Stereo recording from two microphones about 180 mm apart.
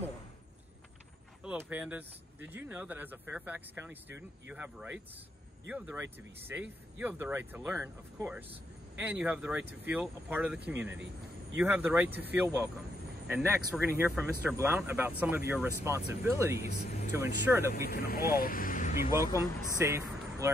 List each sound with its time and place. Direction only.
1.4 s speech: 5° right (ahead or behind)
16.6 s speech: 40° left (ahead or behind)
17.1 s speech: 15° right (ahead or behind)
17.8 s speech: 60° left (ahead or behind)
19.0 s speech: 15° right (ahead or behind)